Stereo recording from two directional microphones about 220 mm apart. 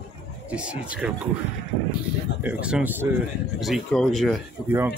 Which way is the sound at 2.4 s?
5° right (ahead or behind).